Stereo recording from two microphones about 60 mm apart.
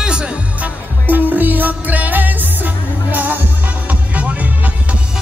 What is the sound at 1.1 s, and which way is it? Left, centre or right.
Music, right.